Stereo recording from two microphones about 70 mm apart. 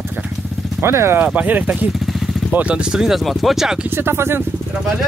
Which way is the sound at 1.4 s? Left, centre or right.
Right.